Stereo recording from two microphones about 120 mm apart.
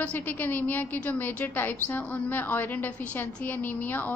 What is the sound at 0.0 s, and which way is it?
A woman's voice, 15° left (ahead or behind).